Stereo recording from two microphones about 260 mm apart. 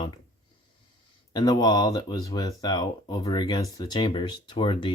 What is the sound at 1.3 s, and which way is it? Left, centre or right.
Speech, centre.